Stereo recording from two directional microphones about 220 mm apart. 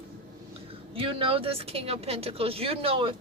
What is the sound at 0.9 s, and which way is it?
Speech, 25° right (ahead or behind).